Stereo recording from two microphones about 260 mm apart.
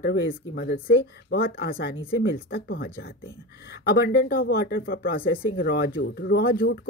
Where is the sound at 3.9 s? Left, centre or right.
Left.